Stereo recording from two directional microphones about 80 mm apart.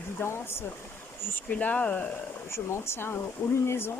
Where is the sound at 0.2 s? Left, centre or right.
Left.